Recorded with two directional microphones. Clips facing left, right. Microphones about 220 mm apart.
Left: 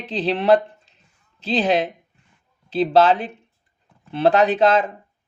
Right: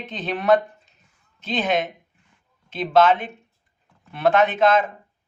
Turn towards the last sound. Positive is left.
turn(degrees=35)  # may be behind; listen again after turning